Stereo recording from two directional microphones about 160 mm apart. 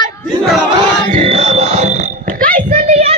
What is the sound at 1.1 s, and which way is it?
Burping, 35° right (ahead or behind).